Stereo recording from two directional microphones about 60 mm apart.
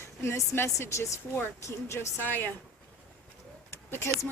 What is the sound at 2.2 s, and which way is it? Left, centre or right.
Speech, left.